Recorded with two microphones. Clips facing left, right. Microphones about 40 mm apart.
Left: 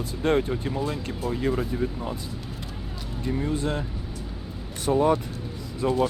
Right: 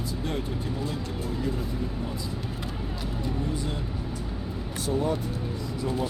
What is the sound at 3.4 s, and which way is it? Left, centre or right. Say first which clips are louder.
Speech: left 7 dB; left.